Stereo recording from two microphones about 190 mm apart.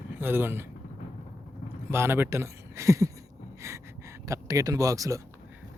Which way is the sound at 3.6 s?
15° right (ahead or behind).